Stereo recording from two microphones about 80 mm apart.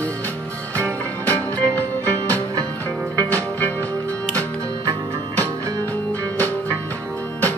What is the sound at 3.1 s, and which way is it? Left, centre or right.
Music, left.